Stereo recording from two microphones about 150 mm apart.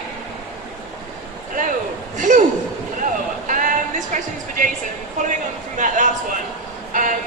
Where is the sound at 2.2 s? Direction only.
55° right (ahead or behind).